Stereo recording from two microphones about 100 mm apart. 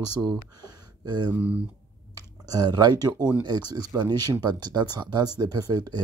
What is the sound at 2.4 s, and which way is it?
Speech, 40° right (ahead or behind).